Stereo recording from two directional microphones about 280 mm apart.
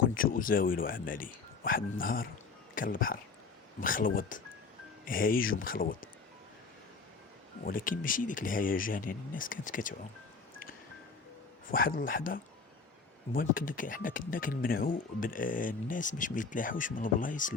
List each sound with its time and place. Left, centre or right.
0.2 s speech: left
7.6 s speech: left
11.7 s speech: left